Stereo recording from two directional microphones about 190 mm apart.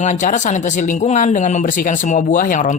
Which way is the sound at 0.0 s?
40° left (ahead or behind).